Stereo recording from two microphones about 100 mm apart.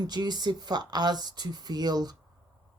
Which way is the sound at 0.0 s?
45° right (ahead or behind).